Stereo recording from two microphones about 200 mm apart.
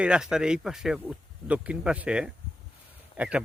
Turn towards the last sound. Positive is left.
turn(degrees=-5)  # may be behind; listen again after turning